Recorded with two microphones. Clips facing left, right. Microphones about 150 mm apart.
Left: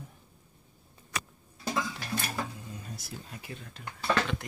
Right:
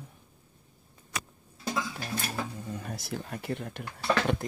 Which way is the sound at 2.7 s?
65° right (ahead or behind).